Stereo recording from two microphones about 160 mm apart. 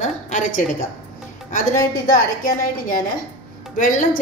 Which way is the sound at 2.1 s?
65° left (ahead or behind).